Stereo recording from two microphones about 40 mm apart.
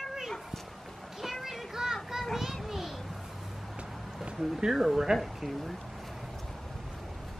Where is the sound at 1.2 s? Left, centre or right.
Centre.